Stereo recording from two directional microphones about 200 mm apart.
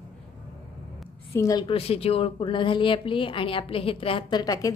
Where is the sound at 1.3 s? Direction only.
15° left (ahead or behind).